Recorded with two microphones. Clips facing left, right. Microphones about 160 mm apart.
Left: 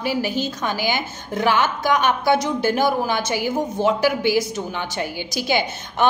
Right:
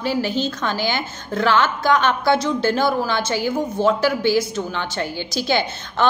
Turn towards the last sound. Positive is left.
turn(degrees=15)  # may be behind; listen again after turning